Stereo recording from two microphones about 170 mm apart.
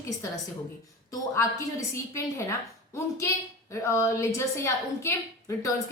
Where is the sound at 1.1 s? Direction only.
20° left (ahead or behind).